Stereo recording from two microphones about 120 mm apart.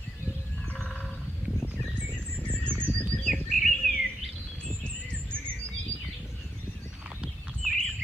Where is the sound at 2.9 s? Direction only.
10° left (ahead or behind).